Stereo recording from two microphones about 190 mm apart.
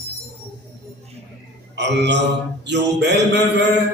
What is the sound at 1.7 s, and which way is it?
A man's voice, 65° right (ahead or behind).